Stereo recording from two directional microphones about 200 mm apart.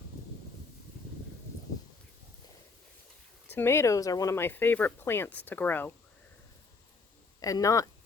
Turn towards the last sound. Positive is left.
turn(degrees=15)  # may be behind; listen again after turning